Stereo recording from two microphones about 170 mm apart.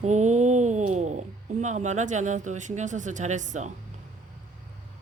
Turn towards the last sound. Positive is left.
turn(degrees=-45)  # may be behind; listen again after turning